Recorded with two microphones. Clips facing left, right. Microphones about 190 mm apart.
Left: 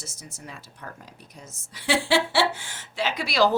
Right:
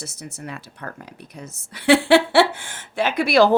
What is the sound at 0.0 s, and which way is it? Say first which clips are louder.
Speech: right 8 dB; 65° right (ahead or behind).